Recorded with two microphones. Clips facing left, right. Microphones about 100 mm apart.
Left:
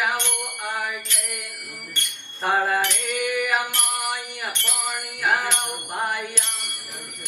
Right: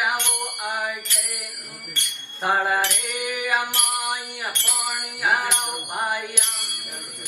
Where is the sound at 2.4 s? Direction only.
15° right (ahead or behind).